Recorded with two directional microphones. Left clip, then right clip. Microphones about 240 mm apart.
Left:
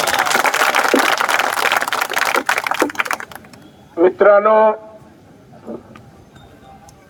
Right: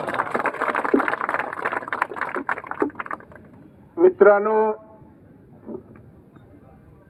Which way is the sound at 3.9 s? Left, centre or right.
Left.